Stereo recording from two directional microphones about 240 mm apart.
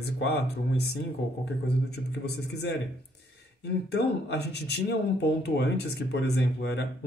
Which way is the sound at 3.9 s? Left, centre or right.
Left.